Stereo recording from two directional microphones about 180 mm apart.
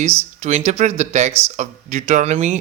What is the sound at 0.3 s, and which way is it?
Speech, 40° right (ahead or behind).